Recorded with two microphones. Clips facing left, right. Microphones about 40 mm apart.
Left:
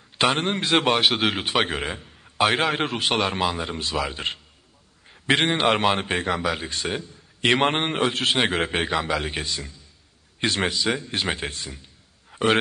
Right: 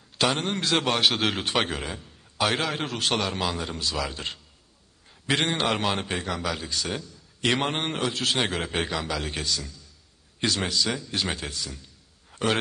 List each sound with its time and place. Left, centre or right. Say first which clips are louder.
0.2 s a man's voice: left 3 dB; left; by 1.7 s centre
1.7 s a man's voice: left 4 dB; left
11.7 s a sound: left 1 dB; left